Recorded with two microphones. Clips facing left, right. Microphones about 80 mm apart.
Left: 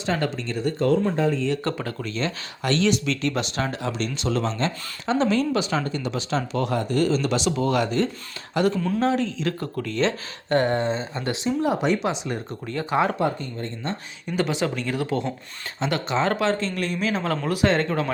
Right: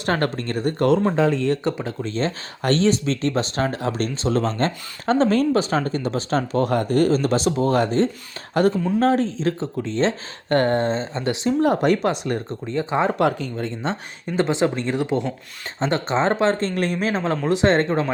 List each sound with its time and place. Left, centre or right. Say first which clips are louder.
0.0 s speech: right 3 dB; right
0.9 s speech: right 3 dB; right
1.6 s speech: right 3 dB; centre
2.0 s speech: right 6 dB; right
8.6 s speech: right 3 dB; right
9.6 s speech: right 2 dB; right
10.5 s speech: right 2 dB; right
11.1 s speech: right 4 dB; centre
11.6 s speech: right 4 dB; right
12.6 s speech: right 1 dB; right
13.1 s speech: right 4 dB; right
14.3 s speech: right 4 dB; right
15.8 s speech: right 3 dB; right
17.3 s speech: right 4 dB; right